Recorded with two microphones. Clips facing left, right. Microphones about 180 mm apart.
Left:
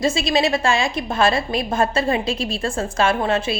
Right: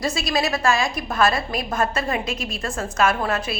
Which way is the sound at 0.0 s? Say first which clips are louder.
Left 4 dB; 25° left (ahead or behind).